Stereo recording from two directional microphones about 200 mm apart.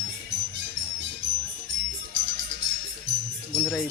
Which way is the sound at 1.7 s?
65° right (ahead or behind).